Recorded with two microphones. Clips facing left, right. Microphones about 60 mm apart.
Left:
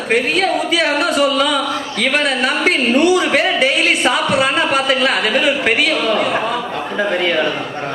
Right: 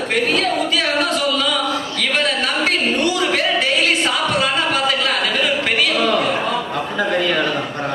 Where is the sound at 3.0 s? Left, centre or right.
Centre.